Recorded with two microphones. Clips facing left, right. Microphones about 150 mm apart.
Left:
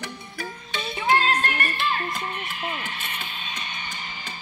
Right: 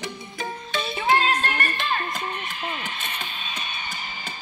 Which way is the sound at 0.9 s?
25° right (ahead or behind).